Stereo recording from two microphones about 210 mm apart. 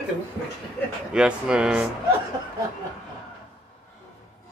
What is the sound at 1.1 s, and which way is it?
Speech, 5° right (ahead or behind).